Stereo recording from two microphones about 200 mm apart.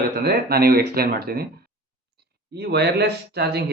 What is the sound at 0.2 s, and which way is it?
Speech, 50° right (ahead or behind).